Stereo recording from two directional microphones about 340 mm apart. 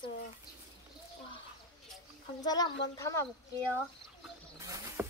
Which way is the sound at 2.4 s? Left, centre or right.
Centre.